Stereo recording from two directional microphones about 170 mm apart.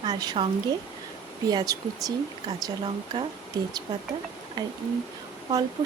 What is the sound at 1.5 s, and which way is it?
Speech, 20° right (ahead or behind).